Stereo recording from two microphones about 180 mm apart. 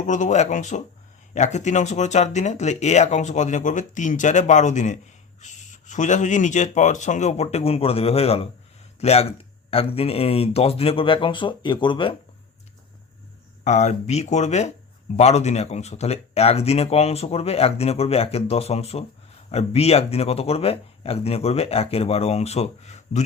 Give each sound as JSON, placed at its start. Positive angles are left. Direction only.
{"t": 0.1, "sound": "speech", "side_deg": 40}
{"t": 13.7, "sound": "speech", "side_deg": 40}